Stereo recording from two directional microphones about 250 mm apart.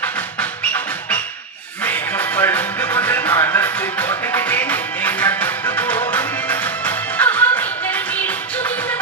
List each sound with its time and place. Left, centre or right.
1.8 s music: centre